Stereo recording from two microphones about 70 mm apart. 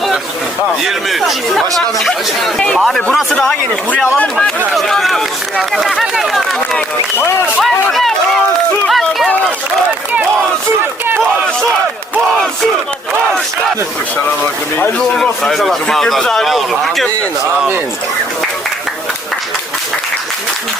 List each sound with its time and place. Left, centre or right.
0.9 s speech: centre
4.7 s speech: centre
7.2 s speech: left
7.6 s speech: centre
8.9 s run: centre
14.9 s speech: centre